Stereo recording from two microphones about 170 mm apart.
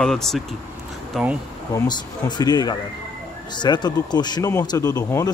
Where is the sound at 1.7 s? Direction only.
25° left (ahead or behind).